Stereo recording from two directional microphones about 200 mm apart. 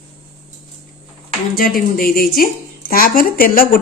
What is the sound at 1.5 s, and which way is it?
A woman's voice, 45° left (ahead or behind).